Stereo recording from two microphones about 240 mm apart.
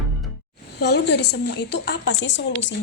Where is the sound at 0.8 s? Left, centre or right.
Left.